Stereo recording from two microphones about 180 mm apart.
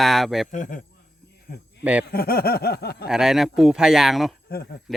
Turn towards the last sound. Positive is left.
turn(degrees=60)  # may be behind; listen again after turning